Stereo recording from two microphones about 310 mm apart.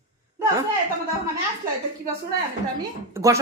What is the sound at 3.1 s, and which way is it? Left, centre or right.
Speech, centre.